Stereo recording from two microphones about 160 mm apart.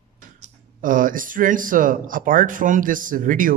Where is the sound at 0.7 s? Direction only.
60° right (ahead or behind).